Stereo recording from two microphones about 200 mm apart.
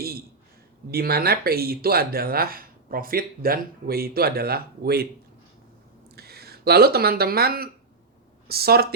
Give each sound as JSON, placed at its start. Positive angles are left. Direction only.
{"t": 0.9, "sound": "speech", "side_deg": -50}
{"t": 6.1, "sound": "speech", "side_deg": -50}